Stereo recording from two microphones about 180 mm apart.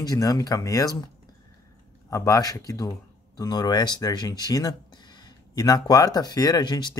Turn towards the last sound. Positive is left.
turn(degrees=25)  # may be behind; listen again after turning